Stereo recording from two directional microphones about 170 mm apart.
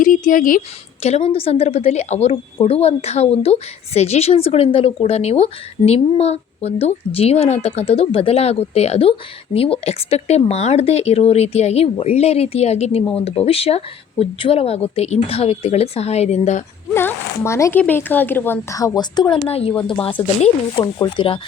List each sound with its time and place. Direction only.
0.0 s speech: 50° left (ahead or behind)
1.0 s a woman's voice: 35° left (ahead or behind)
16.9 s speech: 15° left (ahead or behind)
19.5 s a woman's voice: 35° left (ahead or behind)